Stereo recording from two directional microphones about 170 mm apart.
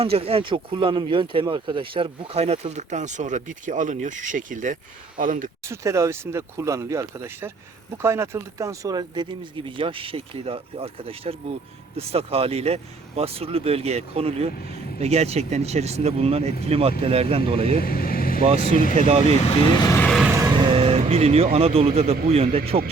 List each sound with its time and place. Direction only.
0.0 s speech: 35° right (ahead or behind); by 5.5 s 50° right (ahead or behind)
5.6 s speech: 15° right (ahead or behind); by 17.7 s 35° right (ahead or behind)
17.7 s speech: 60° left (ahead or behind)
18.9 s speech: 40° right (ahead or behind)
20.0 s vehicle: 5° left (ahead or behind)
20.2 s vehicle: 10° right (ahead or behind)
20.6 s vehicle: 30° right (ahead or behind)
21.5 s speech: 35° right (ahead or behind)